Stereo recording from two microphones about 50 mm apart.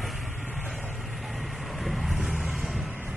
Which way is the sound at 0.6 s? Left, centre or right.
Right.